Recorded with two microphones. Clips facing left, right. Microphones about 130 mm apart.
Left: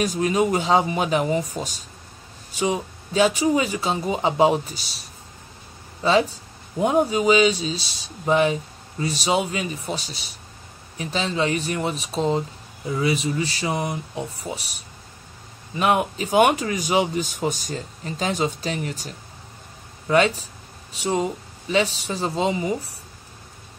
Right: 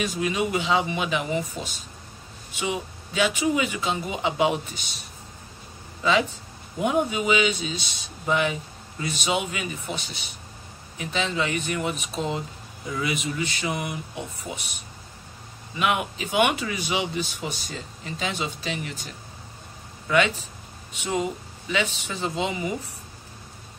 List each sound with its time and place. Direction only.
0.0 s speech: 40° left (ahead or behind)
6.0 s speech: 35° left (ahead or behind)